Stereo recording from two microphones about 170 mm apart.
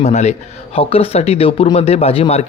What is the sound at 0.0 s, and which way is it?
Speech, 40° left (ahead or behind).